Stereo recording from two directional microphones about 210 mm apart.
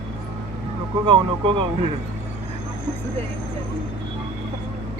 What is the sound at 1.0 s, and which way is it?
Speech, 25° right (ahead or behind).